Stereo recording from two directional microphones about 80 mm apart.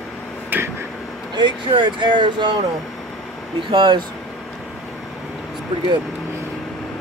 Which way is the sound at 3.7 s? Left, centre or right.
Right.